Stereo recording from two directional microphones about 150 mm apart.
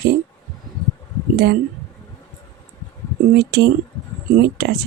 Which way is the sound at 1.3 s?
90° right.